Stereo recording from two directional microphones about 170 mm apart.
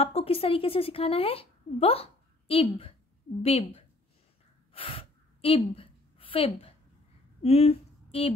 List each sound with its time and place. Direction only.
0.0 s a woman's voice: 35° left (ahead or behind)
4.7 s gasp: 30° left (ahead or behind)
7.4 s speech: 35° left (ahead or behind)